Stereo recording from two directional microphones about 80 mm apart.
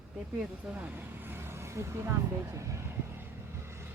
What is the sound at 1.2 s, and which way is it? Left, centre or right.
Vehicle, right.